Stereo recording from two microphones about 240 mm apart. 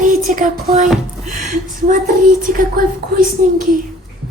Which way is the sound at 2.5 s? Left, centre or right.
Right.